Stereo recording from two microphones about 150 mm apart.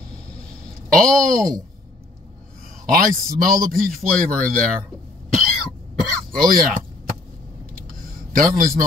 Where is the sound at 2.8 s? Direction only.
65° right (ahead or behind).